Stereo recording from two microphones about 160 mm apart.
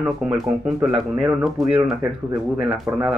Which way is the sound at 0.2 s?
5° right (ahead or behind).